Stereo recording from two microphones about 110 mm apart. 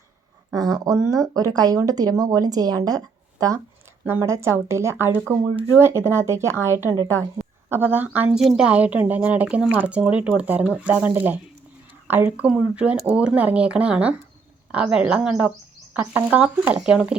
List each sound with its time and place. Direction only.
0.5 s speech: 35° right (ahead or behind)
4.0 s speech: 20° right (ahead or behind)